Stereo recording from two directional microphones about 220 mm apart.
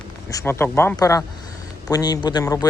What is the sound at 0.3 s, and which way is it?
Speech, 15° left (ahead or behind).